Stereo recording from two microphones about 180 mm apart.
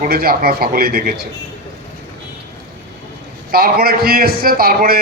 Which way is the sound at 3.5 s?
55° right (ahead or behind).